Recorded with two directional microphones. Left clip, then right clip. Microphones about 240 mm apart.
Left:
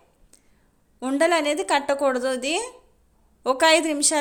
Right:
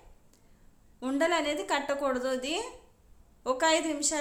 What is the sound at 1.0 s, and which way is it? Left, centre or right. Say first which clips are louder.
A woman's voice: left 7 dB; left.